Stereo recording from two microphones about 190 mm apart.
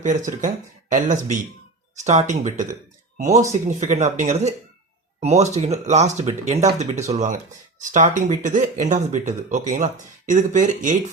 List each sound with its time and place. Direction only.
0.0 s speech: 40° right (ahead or behind)